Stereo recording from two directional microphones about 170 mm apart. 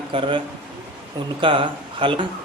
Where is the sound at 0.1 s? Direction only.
30° right (ahead or behind).